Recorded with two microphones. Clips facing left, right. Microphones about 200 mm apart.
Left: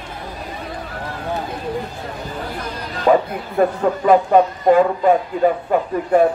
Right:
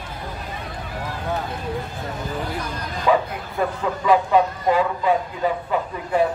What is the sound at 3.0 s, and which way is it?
Speech, 50° left (ahead or behind).